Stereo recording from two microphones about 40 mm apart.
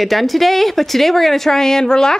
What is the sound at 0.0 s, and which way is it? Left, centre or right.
A woman's voice, centre.